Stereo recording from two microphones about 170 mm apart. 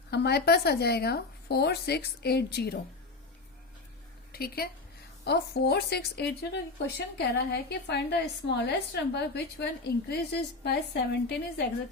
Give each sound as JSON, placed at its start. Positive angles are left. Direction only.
{"t": 0.1, "sound": "a woman's voice", "side_deg": 75}
{"t": 4.3, "sound": "a woman's voice", "side_deg": 65}
{"t": 5.2, "sound": "a woman's voice", "side_deg": 75}
{"t": 10.1, "sound": "a woman's voice", "side_deg": 75}